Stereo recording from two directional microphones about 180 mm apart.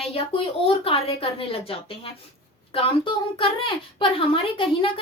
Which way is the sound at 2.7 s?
30° left (ahead or behind).